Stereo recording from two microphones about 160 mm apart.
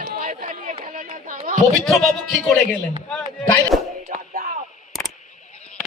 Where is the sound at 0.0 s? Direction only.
60° right (ahead or behind).